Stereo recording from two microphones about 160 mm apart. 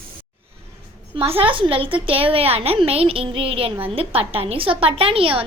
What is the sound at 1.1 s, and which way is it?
A woman's voice, 35° right (ahead or behind).